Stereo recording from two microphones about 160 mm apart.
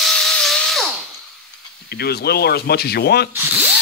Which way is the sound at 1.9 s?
80° left.